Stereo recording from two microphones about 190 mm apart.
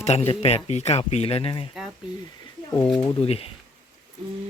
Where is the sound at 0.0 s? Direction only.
35° left (ahead or behind).